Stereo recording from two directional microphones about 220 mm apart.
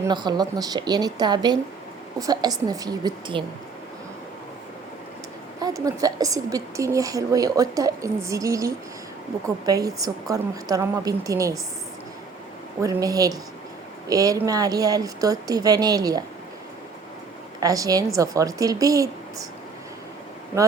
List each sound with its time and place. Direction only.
0.0 s a woman's voice: 20° right (ahead or behind)
5.5 s a woman's voice: 15° right (ahead or behind)
12.8 s a woman's voice: 15° right (ahead or behind)
17.6 s a woman's voice: 15° right (ahead or behind)